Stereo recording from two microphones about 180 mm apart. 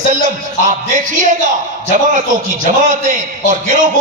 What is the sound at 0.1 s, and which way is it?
A man's voice, 45° right (ahead or behind).